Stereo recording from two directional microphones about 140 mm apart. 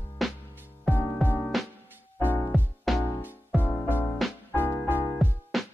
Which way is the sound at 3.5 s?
15° left (ahead or behind).